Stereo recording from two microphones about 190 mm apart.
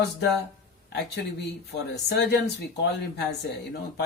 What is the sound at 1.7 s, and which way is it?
Speech, 65° left (ahead or behind).